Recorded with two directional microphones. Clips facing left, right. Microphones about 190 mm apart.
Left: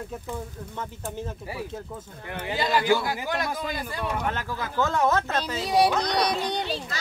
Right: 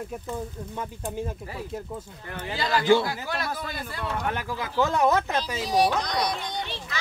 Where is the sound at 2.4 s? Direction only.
20° left (ahead or behind).